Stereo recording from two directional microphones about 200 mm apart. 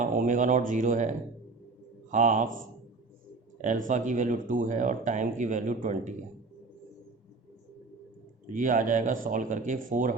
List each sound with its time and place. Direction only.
0.0 s a man's voice: 40° right (ahead or behind)
3.8 s speech: 40° right (ahead or behind)
8.5 s speech: 40° right (ahead or behind)